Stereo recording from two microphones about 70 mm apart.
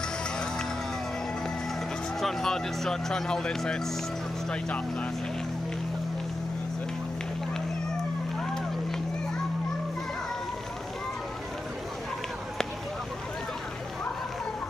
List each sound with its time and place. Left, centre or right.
2.1 s speech: centre